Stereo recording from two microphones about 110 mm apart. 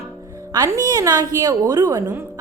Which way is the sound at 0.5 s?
35° right (ahead or behind).